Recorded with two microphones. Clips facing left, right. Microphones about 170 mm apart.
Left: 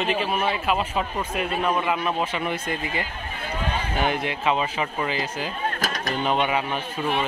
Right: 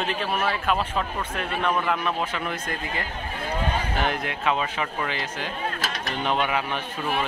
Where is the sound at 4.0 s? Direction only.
Centre (ahead or behind).